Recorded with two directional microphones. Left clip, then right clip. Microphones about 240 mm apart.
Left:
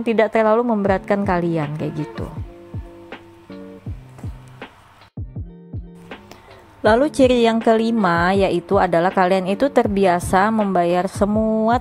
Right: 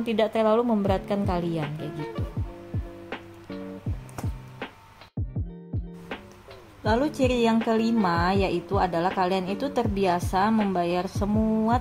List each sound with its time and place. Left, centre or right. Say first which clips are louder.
0.0 s a woman's voice: left 7 dB; left
3.1 s music: right 1 dB; centre
6.8 s a woman's voice: left 10 dB; left